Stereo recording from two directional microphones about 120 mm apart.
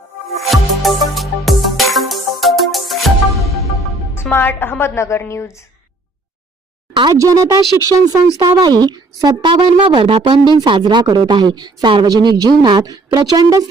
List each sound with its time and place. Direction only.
0.3 s music: centre (ahead or behind)
4.1 s a woman's voice: 20° left (ahead or behind)
7.1 s speech: 25° right (ahead or behind)